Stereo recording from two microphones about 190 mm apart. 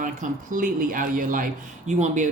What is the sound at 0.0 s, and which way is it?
Speech, 45° right (ahead or behind).